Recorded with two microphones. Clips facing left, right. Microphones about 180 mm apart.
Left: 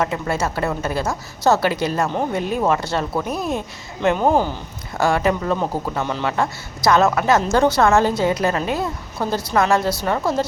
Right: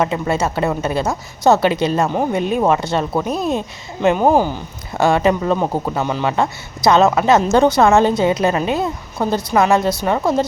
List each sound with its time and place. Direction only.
0.0 s speech: 20° right (ahead or behind)